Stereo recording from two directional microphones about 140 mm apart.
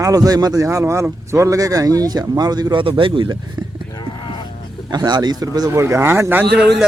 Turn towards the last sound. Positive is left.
turn(degrees=-10)  # may be behind; listen again after turning